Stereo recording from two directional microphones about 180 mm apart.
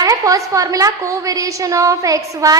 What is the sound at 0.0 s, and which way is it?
A woman's voice, 20° right (ahead or behind).